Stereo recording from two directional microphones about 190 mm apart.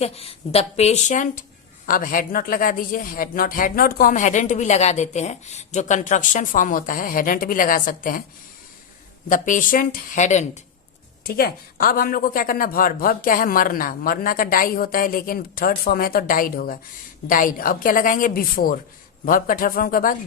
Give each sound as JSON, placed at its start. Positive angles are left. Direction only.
{"t": 0.0, "sound": "a woman's voice", "side_deg": 30}
{"t": 9.3, "sound": "a woman's voice", "side_deg": 45}
{"t": 11.2, "sound": "a woman's voice", "side_deg": 50}